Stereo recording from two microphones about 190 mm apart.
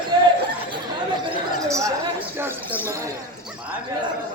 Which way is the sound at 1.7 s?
15° right (ahead or behind).